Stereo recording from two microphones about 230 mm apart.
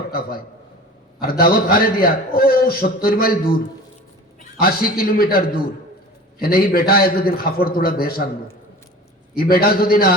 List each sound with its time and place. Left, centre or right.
0.1 s a man's voice: left
4.6 s a man's voice: left
6.4 s a man's voice: left
9.3 s a man's voice: left